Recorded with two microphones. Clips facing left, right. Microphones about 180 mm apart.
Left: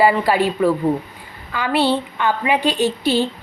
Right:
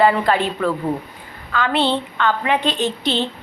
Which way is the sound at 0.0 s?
5° left (ahead or behind).